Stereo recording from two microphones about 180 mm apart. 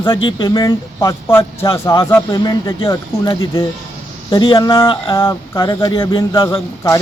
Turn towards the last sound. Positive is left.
turn(degrees=20)  # may be behind; listen again after turning